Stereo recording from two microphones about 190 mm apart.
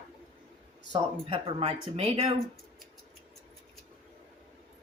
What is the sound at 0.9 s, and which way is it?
Speech, 30° right (ahead or behind).